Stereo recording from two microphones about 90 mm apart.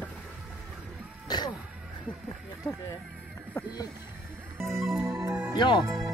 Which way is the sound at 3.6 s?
30° left (ahead or behind).